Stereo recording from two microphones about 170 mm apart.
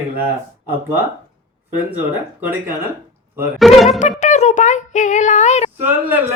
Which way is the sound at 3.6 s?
Centre (ahead or behind).